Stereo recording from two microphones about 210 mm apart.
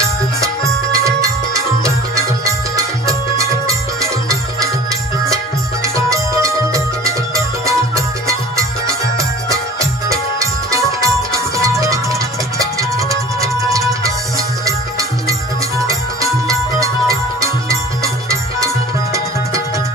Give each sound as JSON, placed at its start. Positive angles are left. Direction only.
{"t": 0.4, "sound": "music", "side_deg": -15}